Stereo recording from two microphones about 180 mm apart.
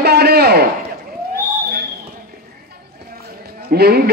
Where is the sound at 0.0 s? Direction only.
65° right (ahead or behind).